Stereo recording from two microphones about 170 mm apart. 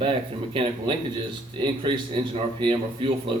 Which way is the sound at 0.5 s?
30° right (ahead or behind).